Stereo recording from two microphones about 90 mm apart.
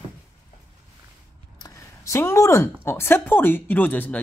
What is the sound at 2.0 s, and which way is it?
Speech, 30° left (ahead or behind).